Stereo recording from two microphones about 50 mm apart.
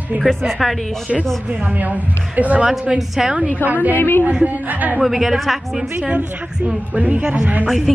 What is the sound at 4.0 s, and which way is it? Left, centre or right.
Speech, left.